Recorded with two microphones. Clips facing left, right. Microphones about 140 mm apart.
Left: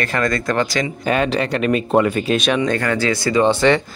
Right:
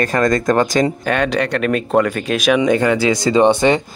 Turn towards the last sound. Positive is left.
turn(degrees=-15)  # may be behind; listen again after turning